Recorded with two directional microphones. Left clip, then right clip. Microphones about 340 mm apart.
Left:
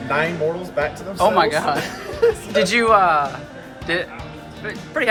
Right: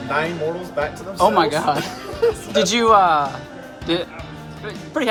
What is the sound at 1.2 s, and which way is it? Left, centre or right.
Speech, right.